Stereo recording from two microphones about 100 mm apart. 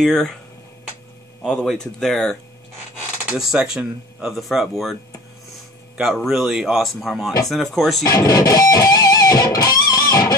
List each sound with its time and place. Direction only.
0.0 s speech: 5° left (ahead or behind)
1.4 s speech: 5° left (ahead or behind)
3.3 s speech: 10° right (ahead or behind)
5.9 s speech: 5° right (ahead or behind)
8.0 s speech: 35° left (ahead or behind)